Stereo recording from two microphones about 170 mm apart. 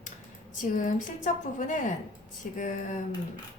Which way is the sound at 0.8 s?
50° left (ahead or behind).